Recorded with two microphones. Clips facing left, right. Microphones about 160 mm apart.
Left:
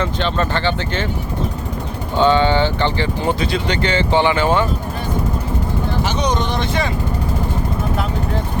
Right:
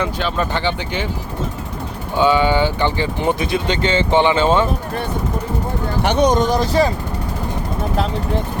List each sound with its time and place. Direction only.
0.0 s speech: 10° right (ahead or behind)
2.1 s speech: 10° right (ahead or behind)
6.0 s speech: 60° right (ahead or behind); by 6.9 s 35° right (ahead or behind)